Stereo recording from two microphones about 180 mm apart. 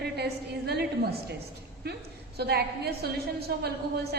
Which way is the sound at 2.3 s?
65° right (ahead or behind).